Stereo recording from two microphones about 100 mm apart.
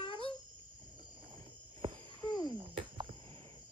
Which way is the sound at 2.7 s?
60° right (ahead or behind).